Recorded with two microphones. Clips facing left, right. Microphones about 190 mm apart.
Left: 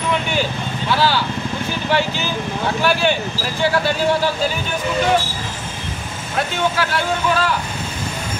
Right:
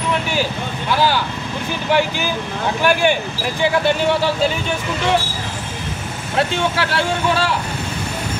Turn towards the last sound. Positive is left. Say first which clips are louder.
# even
turn(degrees=-30)  # may be behind; listen again after turning